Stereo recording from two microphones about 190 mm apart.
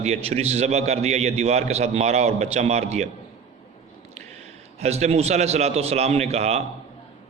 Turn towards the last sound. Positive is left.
turn(degrees=-35)  # may be behind; listen again after turning